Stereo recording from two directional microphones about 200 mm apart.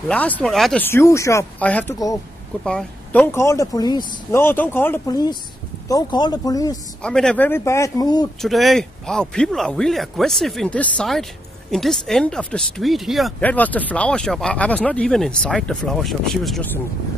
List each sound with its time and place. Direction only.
0.1 s speech: 5° left (ahead or behind)
0.8 s speech: 15° left (ahead or behind)
7.0 s speech: 5° left (ahead or behind); by 8.3 s 20° left (ahead or behind)
8.4 s speech: centre (ahead or behind)